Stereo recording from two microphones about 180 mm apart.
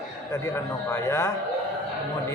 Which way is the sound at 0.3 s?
15° left (ahead or behind).